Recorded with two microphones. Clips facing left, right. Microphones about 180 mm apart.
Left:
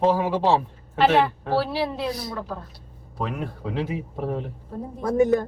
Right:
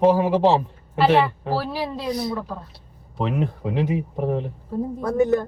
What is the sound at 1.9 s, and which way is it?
Speech, 20° right (ahead or behind).